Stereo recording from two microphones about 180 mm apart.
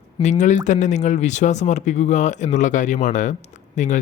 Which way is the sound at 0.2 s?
40° left (ahead or behind).